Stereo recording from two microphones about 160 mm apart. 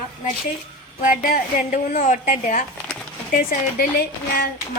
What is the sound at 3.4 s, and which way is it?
A woman's voice, 65° left (ahead or behind).